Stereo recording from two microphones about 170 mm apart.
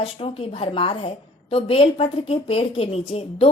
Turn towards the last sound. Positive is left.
turn(degrees=35)  # may be behind; listen again after turning